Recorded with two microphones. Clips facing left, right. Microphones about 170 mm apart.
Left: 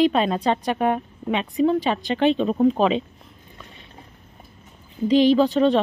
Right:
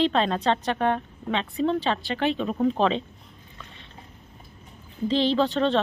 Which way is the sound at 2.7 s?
10° left (ahead or behind).